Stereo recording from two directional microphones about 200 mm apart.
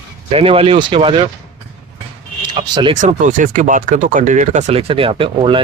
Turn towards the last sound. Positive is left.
turn(degrees=-25)  # may be behind; listen again after turning